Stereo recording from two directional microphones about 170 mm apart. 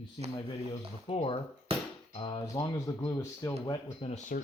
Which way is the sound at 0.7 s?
35° left (ahead or behind).